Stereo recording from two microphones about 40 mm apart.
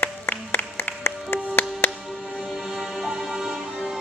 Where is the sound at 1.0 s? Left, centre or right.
Left.